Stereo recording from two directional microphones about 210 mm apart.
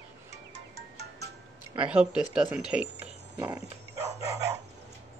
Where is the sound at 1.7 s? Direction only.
5° right (ahead or behind).